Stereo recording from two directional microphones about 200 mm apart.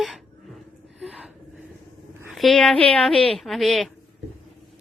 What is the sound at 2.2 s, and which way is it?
A woman's voice, centre (ahead or behind).